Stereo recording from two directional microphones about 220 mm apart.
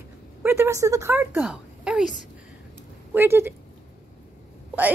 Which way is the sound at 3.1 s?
10° right (ahead or behind).